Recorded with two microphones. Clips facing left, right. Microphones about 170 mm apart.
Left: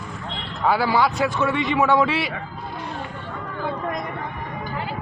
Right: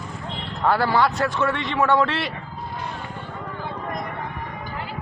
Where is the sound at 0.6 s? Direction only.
5° left (ahead or behind).